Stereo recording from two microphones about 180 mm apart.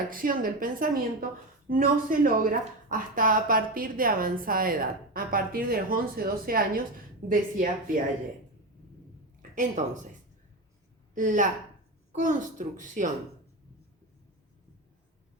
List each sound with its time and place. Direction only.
0.1 s speech: 50° right (ahead or behind)
9.4 s a woman's voice: 45° right (ahead or behind)
11.1 s a woman's voice: 45° right (ahead or behind)